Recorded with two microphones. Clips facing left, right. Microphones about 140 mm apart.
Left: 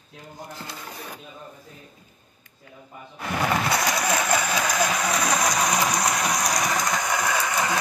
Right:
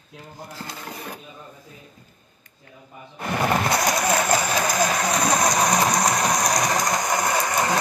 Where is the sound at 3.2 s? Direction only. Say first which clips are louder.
Right 2 dB; 45° right (ahead or behind).